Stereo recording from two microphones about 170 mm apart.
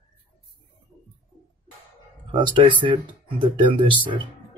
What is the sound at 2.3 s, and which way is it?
Speech, 30° right (ahead or behind).